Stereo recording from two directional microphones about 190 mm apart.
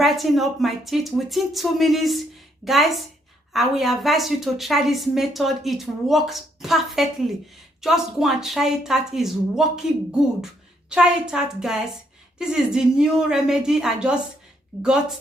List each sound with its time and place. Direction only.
0.0 s a woman's voice: centre (ahead or behind)